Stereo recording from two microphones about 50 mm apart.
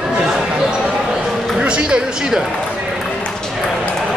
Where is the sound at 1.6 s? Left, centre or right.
Centre.